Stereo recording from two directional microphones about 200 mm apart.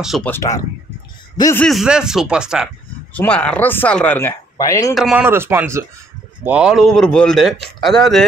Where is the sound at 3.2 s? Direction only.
5° left (ahead or behind).